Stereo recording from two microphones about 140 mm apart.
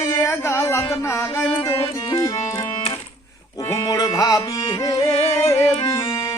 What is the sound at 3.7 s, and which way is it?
Music, 25° left (ahead or behind).